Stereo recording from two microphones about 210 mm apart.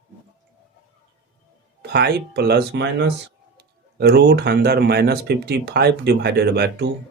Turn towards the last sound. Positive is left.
turn(degrees=-50)  # may be behind; listen again after turning